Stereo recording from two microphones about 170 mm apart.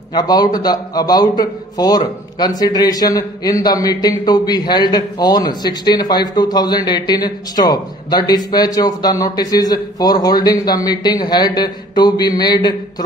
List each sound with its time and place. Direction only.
0.1 s a man's voice: 25° left (ahead or behind)